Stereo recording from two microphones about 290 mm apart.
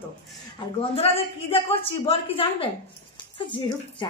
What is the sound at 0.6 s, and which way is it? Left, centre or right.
A woman's voice, centre.